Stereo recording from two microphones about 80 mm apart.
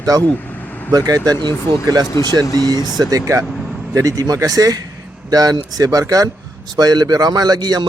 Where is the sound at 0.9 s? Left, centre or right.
Right.